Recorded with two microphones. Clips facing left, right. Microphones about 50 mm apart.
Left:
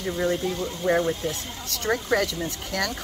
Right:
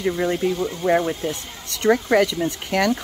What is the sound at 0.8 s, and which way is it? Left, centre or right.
Speech, centre.